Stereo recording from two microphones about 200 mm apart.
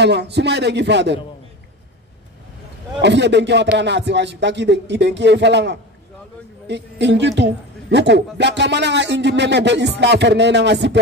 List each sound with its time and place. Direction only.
0.0 s a man's voice: 55° right (ahead or behind)
3.0 s a man's voice: 60° right (ahead or behind)